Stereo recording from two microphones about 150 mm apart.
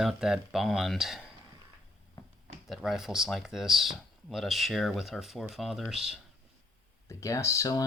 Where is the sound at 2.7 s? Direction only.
Centre (ahead or behind).